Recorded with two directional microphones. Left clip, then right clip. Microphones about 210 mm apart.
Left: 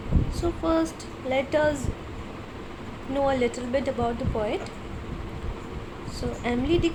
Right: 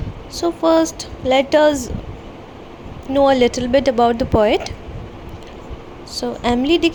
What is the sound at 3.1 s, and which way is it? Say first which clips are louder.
A woman's voice: right 11 dB; 35° right (ahead or behind).